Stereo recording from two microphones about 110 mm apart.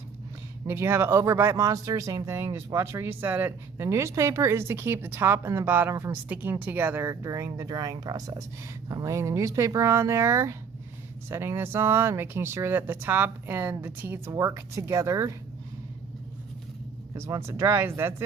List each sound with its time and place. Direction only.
0.7 s speech: 25° right (ahead or behind)
17.2 s speech: 25° right (ahead or behind)